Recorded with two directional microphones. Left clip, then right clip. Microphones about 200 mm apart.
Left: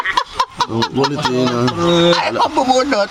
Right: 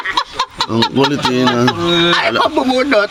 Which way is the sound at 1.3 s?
Centre (ahead or behind).